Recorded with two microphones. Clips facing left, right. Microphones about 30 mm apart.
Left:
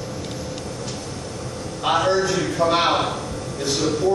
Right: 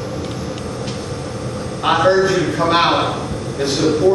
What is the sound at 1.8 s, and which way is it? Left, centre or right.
A man's voice, right.